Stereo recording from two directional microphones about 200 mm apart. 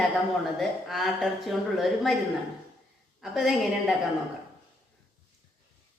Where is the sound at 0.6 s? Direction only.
Centre (ahead or behind).